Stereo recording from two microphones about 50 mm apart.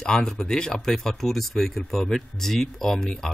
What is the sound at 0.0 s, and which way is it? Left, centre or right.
A man's voice, centre.